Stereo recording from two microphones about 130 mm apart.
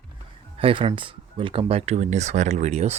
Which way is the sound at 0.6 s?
45° right (ahead or behind).